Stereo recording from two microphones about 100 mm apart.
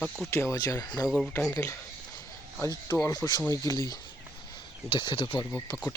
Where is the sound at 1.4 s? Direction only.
35° left (ahead or behind).